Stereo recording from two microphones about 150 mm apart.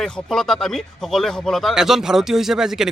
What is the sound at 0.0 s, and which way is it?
Speech, 5° left (ahead or behind).